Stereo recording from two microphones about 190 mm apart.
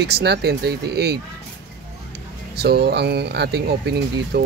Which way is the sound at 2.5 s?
60° right (ahead or behind).